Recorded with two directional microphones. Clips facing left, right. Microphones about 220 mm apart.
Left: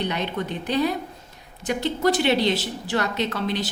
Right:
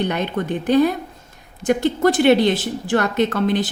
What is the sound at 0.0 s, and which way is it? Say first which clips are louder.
A woman's voice: right 5 dB; 50° right (ahead or behind).